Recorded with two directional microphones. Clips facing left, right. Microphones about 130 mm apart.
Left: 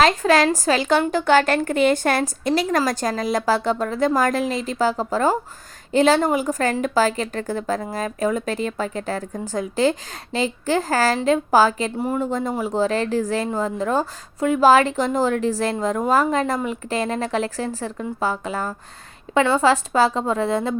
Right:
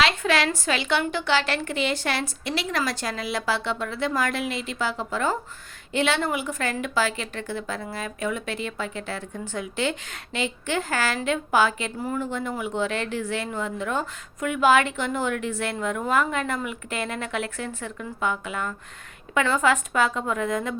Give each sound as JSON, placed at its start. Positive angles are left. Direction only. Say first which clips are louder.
{"t": 0.0, "sound": "a woman's voice", "louder": "left 6 dB", "side_deg": 40}